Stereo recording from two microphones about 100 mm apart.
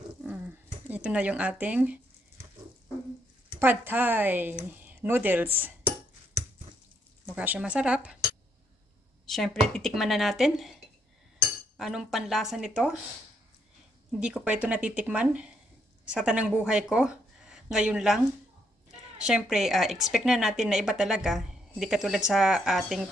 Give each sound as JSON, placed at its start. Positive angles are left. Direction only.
{"t": 0.2, "sound": "a sound", "side_deg": -15}
{"t": 3.5, "sound": "speech", "side_deg": -20}
{"t": 7.3, "sound": "speech", "side_deg": -15}
{"t": 9.2, "sound": "a woman's voice", "side_deg": 5}
{"t": 14.2, "sound": "a woman's voice", "side_deg": -10}